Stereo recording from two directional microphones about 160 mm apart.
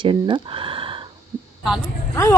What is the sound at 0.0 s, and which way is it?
Speech, 30° right (ahead or behind).